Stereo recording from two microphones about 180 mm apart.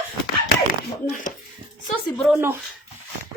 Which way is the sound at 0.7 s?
50° left (ahead or behind).